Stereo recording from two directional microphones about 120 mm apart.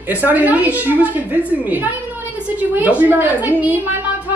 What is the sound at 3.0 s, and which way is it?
Speech, 15° right (ahead or behind).